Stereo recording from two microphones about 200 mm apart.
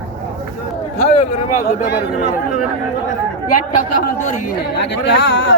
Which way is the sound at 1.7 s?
55° left (ahead or behind).